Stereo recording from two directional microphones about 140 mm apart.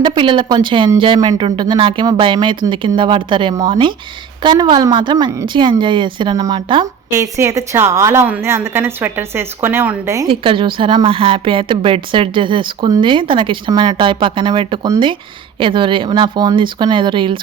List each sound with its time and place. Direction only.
0.0 s a woman's voice: 35° right (ahead or behind)
7.2 s a woman's voice: 20° right (ahead or behind)
10.2 s a woman's voice: 40° right (ahead or behind)